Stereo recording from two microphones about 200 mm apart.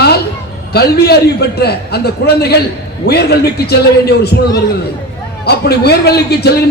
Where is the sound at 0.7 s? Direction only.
50° left (ahead or behind).